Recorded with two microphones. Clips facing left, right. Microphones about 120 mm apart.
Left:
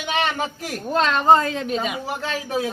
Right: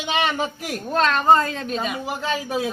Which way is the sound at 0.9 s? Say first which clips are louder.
Left 1 dB; 20° left (ahead or behind).